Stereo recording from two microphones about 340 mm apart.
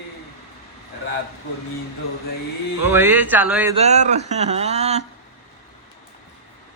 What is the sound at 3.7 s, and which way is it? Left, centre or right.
Mantra, centre.